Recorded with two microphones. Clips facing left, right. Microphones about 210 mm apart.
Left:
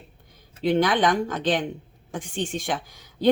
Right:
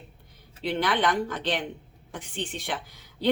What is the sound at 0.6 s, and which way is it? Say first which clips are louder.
A woman's voice: left 5 dB; 45° left (ahead or behind).